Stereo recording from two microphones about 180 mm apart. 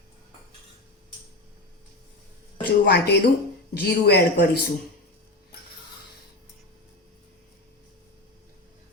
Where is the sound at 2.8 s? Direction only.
60° left (ahead or behind).